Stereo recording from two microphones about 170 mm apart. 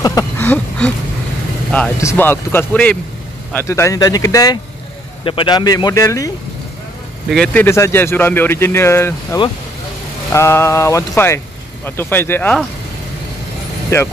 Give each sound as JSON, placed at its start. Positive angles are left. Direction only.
{"t": 0.0, "sound": "a sound", "side_deg": 20}
{"t": 0.5, "sound": "speech", "side_deg": 10}
{"t": 2.0, "sound": "speech", "side_deg": 15}
{"t": 5.2, "sound": "speech", "side_deg": 30}
{"t": 7.2, "sound": "speech", "side_deg": 5}
{"t": 7.6, "sound": "speech", "side_deg": 15}